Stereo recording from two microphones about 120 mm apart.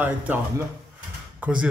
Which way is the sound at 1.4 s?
10° right (ahead or behind).